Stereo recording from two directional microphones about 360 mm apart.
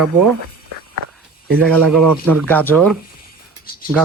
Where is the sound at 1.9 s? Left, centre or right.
Right.